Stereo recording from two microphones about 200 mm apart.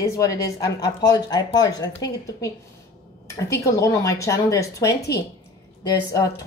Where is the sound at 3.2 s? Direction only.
15° left (ahead or behind).